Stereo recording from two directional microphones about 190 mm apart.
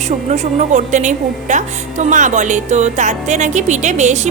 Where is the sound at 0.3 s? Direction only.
40° right (ahead or behind).